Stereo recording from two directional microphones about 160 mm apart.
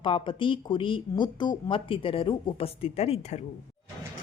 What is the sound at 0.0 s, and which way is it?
Speech, 30° left (ahead or behind).